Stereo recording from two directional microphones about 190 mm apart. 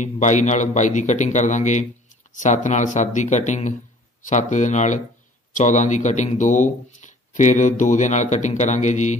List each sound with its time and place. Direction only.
0.0 s speech: 40° left (ahead or behind)